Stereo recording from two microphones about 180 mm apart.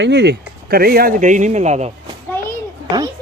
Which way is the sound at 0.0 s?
70° right (ahead or behind).